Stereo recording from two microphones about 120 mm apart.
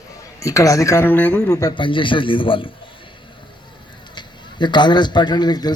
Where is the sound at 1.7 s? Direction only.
45° left (ahead or behind).